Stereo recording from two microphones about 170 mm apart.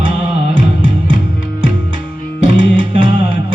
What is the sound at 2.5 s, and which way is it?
Music, 30° right (ahead or behind).